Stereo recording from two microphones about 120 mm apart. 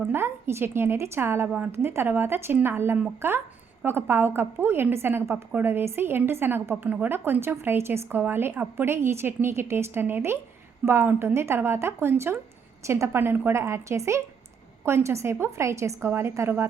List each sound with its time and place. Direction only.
0.0 s a woman's voice: 20° right (ahead or behind)